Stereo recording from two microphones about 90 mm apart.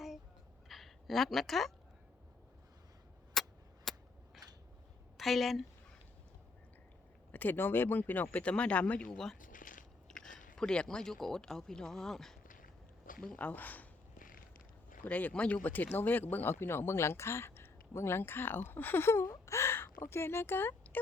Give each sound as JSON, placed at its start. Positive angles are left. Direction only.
{"t": 0.7, "sound": "a woman's voice", "side_deg": 0}
{"t": 3.3, "sound": "cap gun", "side_deg": 5}
{"t": 5.1, "sound": "a woman's voice", "side_deg": 0}
{"t": 7.3, "sound": "speech", "side_deg": 20}
{"t": 13.2, "sound": "speech", "side_deg": 15}
{"t": 15.0, "sound": "speech", "side_deg": 15}